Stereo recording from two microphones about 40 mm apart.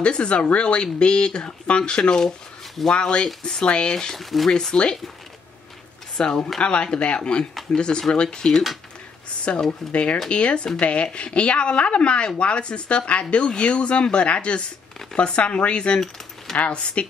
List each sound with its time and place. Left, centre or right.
0.0 s speech: left
4.2 s speech: centre
4.5 s speech: centre
6.1 s speech: centre